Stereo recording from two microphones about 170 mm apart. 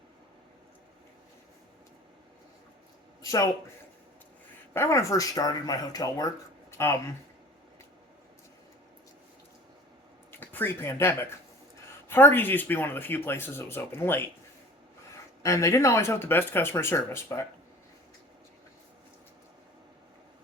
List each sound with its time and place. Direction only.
3.2 s speech: 20° left (ahead or behind)
4.7 s speech: 15° left (ahead or behind)
10.3 s speech: 10° left (ahead or behind)
15.4 s speech: 20° left (ahead or behind)